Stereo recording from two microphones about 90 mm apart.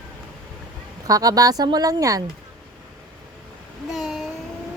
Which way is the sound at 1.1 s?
45° right (ahead or behind).